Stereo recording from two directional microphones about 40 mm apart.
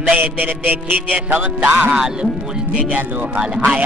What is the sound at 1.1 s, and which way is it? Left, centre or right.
Music, right.